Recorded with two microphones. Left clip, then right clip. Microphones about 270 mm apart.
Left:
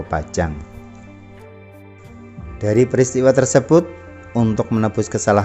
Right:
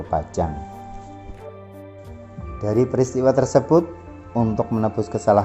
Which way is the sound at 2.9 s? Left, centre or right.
Left.